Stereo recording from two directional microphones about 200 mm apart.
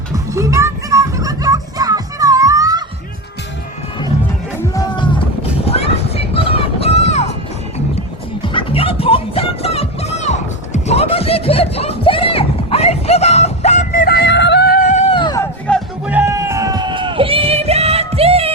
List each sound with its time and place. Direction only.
0.1 s music: 15° right (ahead or behind)
4.7 s music: 20° left (ahead or behind)
5.4 s a sound: 30° left (ahead or behind)
8.4 s music: 25° left (ahead or behind)
15.7 s music: 5° left (ahead or behind)
16.0 s a sound: 10° right (ahead or behind); by 18.5 s 30° right (ahead or behind)